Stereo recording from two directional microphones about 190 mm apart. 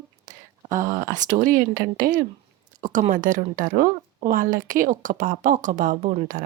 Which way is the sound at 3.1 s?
45° right (ahead or behind).